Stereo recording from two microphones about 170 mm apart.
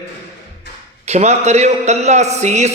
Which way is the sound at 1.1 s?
40° right (ahead or behind).